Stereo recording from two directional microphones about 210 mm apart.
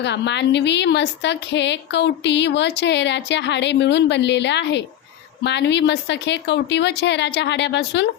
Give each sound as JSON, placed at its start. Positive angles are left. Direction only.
{"t": 0.0, "sound": "a woman's voice", "side_deg": 55}